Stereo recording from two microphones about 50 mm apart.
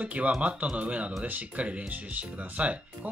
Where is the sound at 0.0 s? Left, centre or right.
Right.